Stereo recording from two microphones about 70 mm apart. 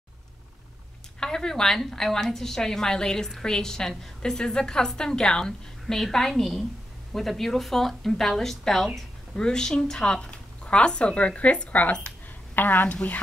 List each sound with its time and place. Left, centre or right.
1.2 s a woman's voice: centre